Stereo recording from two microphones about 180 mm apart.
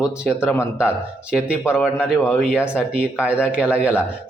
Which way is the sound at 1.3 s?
5° right (ahead or behind).